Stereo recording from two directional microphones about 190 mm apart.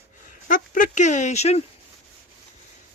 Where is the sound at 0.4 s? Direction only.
45° left (ahead or behind).